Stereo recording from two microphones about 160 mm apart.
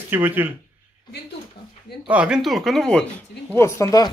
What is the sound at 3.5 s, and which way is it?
Speech, 15° left (ahead or behind).